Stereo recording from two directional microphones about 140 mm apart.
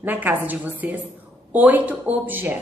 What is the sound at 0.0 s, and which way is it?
A woman's voice, 10° right (ahead or behind).